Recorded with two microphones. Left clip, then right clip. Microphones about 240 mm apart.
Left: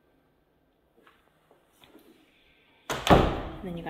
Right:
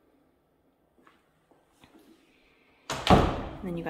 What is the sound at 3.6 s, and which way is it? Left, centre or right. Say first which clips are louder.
Speech: right 3 dB; centre.